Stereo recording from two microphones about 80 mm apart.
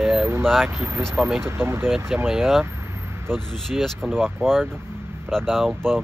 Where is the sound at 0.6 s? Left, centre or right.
Right.